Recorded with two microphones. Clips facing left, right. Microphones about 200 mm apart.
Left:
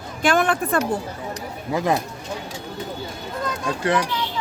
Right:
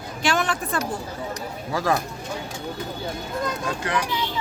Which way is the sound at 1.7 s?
20° left (ahead or behind).